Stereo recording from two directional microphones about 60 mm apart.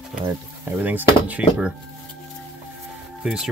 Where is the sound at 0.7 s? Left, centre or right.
Right.